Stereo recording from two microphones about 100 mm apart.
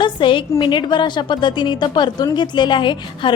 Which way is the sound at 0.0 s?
55° left (ahead or behind).